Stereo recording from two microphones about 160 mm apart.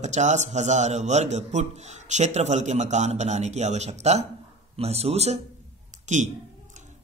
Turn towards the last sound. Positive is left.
turn(degrees=-50)  # may be behind; listen again after turning